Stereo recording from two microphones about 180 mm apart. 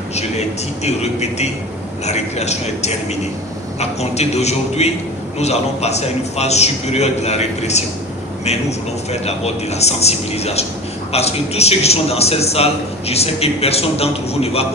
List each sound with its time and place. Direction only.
0.8 s a man's voice: 35° left (ahead or behind)